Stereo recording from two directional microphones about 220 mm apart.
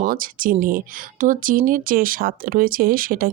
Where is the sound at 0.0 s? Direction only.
40° right (ahead or behind).